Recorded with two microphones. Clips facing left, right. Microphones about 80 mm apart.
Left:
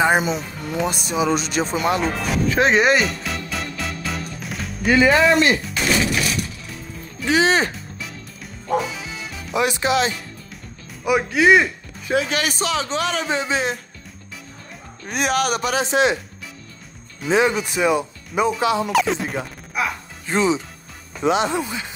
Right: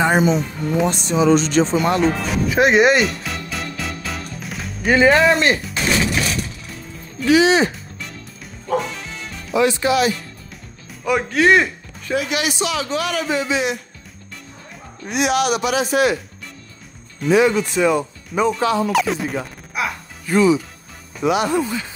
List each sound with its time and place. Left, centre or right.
0.0 s speech: centre
2.5 s music: centre
4.8 s speech: right
7.2 s a man's voice: left
8.6 s music: centre
9.6 s speech: centre
11.1 s speech: centre
12.3 s a man's voice: left
15.0 s a man's voice: left
15.9 s speech: left
17.3 s speech: centre
18.9 s speech: centre
20.2 s speech: left